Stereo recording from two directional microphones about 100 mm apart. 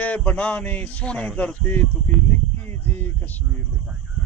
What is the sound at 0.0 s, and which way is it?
Male singing, 15° left (ahead or behind).